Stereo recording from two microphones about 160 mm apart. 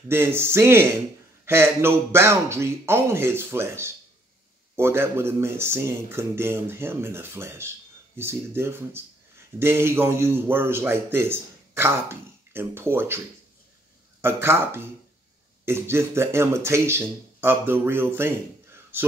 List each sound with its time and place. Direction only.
0.1 s a man's voice: 15° right (ahead or behind)
14.2 s a man's voice: 15° right (ahead or behind)